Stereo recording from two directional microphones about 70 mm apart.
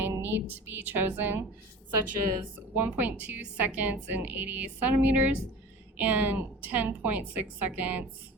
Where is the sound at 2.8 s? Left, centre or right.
Right.